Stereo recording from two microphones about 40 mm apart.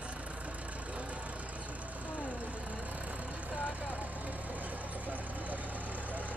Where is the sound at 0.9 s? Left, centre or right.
Right.